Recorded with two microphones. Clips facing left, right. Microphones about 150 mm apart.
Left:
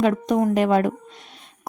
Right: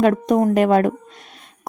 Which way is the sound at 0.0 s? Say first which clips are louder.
Right 3 dB; 50° right (ahead or behind).